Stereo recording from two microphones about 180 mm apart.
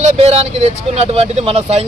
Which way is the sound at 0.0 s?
35° right (ahead or behind).